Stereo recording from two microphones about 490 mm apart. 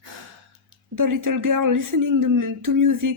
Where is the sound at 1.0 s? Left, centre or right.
Right.